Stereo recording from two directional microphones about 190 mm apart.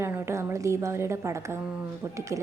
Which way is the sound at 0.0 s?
15° right (ahead or behind).